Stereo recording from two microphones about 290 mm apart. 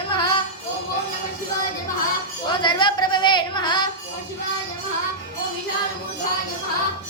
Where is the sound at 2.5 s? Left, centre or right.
Centre.